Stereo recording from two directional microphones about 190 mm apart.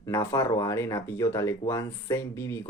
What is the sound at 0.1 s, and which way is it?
Speech, 15° left (ahead or behind).